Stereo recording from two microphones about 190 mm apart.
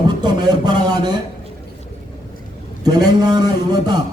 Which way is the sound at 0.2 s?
20° right (ahead or behind).